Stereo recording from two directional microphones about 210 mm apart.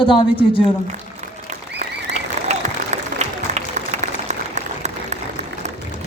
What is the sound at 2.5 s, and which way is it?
Applause, 30° right (ahead or behind).